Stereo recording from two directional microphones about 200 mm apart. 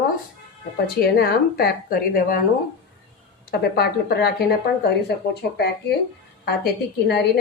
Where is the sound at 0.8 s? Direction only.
50° left (ahead or behind).